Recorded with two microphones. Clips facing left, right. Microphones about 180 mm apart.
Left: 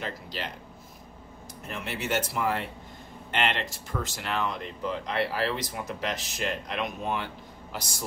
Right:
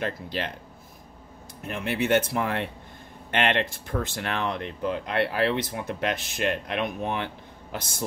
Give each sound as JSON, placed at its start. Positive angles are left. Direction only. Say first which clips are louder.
{"t": 0.0, "sound": "speech", "louder": "right 5 dB", "side_deg": -55}
{"t": 1.7, "sound": "a woman's voice", "louder": "right 7 dB", "side_deg": -55}